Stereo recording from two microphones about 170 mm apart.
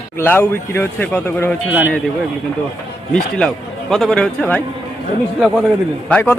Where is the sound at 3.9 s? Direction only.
5° left (ahead or behind).